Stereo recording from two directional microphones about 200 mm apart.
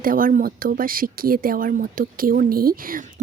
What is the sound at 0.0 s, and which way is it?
Speech, 45° right (ahead or behind).